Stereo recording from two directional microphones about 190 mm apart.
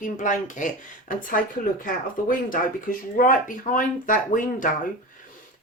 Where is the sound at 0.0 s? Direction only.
40° left (ahead or behind).